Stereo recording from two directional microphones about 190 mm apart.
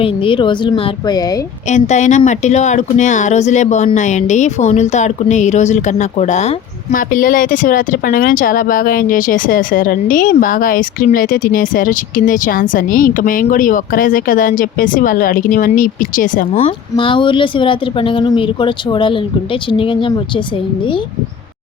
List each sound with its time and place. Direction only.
0.0 s speech: 30° left (ahead or behind)
1.7 s speech: 40° left (ahead or behind)
16.9 s speech: 25° left (ahead or behind)